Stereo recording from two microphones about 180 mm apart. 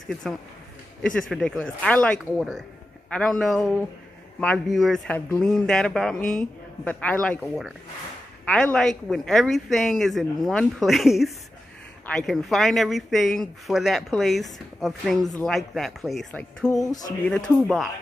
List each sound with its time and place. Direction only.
0.2 s speech: 5° left (ahead or behind)
16.7 s music: 20° left (ahead or behind)
17.3 s speech: 5° left (ahead or behind)